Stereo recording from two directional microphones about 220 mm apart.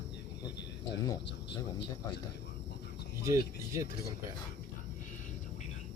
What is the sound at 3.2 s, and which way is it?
Speech, 15° right (ahead or behind).